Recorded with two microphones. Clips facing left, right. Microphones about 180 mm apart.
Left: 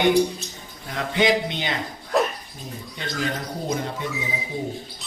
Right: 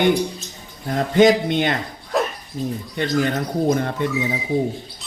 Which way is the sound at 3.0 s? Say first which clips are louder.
Right 8 dB; 60° right (ahead or behind).